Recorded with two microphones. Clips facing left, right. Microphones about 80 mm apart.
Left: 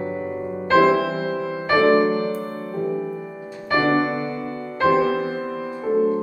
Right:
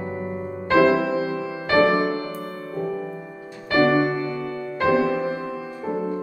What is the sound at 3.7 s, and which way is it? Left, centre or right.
Music, left.